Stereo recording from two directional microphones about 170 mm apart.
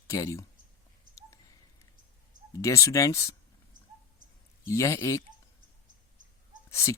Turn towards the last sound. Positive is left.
turn(degrees=15)  # may be behind; listen again after turning